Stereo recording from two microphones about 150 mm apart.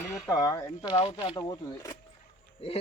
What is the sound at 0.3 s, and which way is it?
Speech, 25° left (ahead or behind).